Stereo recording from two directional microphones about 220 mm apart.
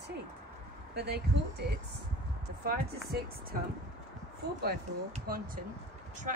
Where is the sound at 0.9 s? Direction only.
45° right (ahead or behind).